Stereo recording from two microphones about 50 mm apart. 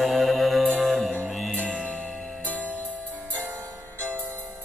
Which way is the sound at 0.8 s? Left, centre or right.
Centre.